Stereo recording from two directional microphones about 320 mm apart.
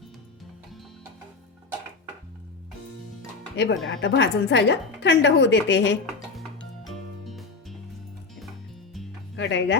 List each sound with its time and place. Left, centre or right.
3.5 s a woman's voice: left
6.8 s music: centre
9.3 s speech: left